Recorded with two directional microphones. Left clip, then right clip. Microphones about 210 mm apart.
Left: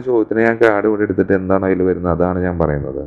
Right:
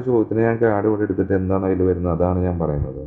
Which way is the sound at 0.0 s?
30° left (ahead or behind).